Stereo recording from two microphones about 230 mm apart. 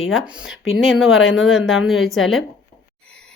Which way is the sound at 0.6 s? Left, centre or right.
Left.